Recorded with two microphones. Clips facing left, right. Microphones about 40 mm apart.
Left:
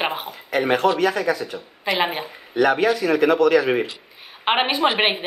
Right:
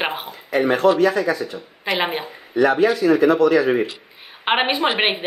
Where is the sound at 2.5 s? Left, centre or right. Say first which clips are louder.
Right 2 dB; left.